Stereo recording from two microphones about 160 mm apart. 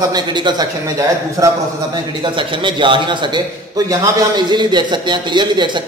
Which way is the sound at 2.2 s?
30° right (ahead or behind).